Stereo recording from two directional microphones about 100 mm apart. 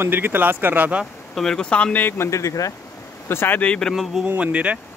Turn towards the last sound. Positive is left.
turn(degrees=-15)  # may be behind; listen again after turning